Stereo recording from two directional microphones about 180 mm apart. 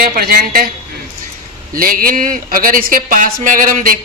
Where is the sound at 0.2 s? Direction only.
55° right (ahead or behind).